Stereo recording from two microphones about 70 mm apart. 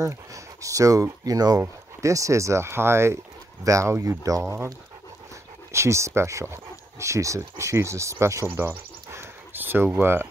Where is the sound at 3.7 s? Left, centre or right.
Right.